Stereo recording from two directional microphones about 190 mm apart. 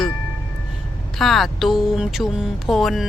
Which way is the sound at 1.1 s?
Centre (ahead or behind).